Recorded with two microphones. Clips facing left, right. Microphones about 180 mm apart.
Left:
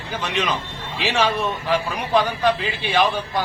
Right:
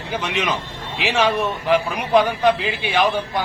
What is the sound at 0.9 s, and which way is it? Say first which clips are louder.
Speech: right 2 dB; 15° right (ahead or behind).